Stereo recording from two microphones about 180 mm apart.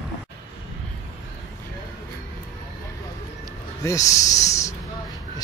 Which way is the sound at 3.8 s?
20° left (ahead or behind).